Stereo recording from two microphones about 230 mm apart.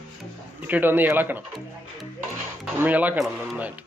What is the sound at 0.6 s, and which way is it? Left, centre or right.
A man's voice, centre.